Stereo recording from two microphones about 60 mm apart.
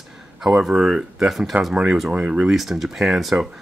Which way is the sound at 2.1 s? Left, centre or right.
Centre.